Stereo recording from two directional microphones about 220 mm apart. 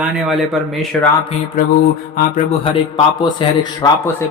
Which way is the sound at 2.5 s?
25° left (ahead or behind).